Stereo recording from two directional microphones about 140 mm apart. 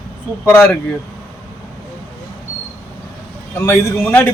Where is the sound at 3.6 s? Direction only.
20° left (ahead or behind).